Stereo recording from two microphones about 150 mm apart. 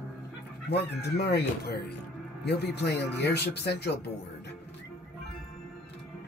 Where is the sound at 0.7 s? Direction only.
90° left.